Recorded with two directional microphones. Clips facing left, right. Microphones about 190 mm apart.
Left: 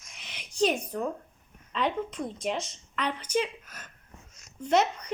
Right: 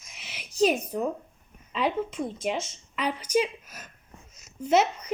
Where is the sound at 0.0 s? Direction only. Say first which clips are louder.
Right 2 dB; 5° right (ahead or behind).